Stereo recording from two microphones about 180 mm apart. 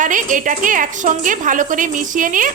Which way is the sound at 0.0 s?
45° right (ahead or behind).